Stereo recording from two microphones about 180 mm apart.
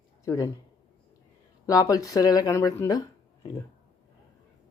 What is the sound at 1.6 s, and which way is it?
Speech, 20° left (ahead or behind).